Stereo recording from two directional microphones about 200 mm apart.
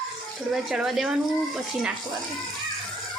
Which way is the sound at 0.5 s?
Centre (ahead or behind).